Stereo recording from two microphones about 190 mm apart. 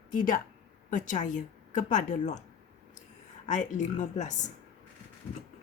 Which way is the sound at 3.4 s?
40° left (ahead or behind).